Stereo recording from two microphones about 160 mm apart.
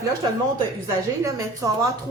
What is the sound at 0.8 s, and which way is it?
Speech, 20° right (ahead or behind).